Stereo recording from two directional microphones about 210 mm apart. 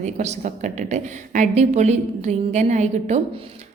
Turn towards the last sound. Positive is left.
turn(degrees=-35)  # may be behind; listen again after turning